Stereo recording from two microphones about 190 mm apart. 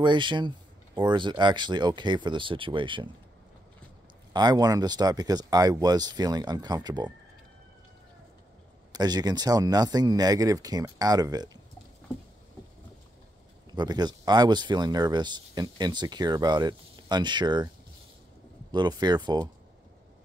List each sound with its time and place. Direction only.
0.0 s speech: 25° right (ahead or behind)
4.3 s speech: 20° right (ahead or behind)
8.9 s speech: 20° right (ahead or behind)
13.7 s speech: 20° right (ahead or behind)
18.7 s speech: 20° right (ahead or behind)